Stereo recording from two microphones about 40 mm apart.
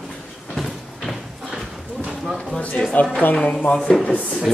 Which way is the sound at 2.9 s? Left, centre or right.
Left.